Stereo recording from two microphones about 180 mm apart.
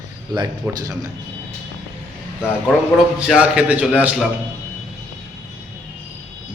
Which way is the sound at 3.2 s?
5° right (ahead or behind).